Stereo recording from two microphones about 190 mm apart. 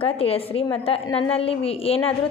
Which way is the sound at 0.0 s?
30° left (ahead or behind).